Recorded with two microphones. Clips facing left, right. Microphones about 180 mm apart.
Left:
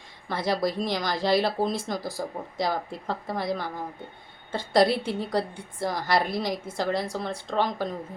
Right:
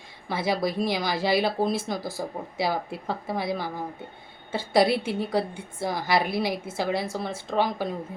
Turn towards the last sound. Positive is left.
turn(degrees=-5)  # may be behind; listen again after turning